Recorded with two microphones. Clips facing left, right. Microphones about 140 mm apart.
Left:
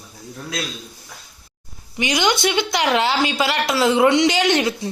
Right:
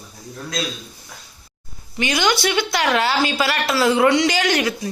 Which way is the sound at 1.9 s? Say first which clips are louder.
Even; 15° left (ahead or behind).